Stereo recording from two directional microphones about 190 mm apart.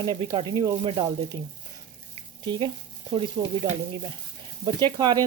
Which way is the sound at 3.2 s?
35° right (ahead or behind).